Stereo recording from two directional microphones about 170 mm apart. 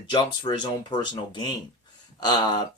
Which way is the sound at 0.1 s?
30° left (ahead or behind).